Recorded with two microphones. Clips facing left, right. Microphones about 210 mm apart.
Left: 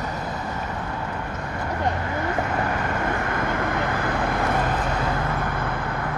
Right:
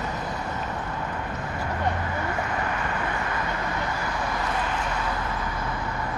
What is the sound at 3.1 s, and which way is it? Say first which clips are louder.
Vehicle: left 4 dB; 50° left (ahead or behind).